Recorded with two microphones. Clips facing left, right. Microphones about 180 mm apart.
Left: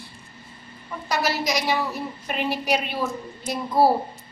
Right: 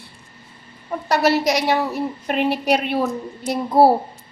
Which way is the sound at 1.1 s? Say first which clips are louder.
Right 7 dB; 70° right (ahead or behind).